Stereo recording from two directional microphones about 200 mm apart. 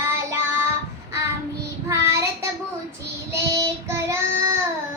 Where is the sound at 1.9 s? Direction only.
15° right (ahead or behind).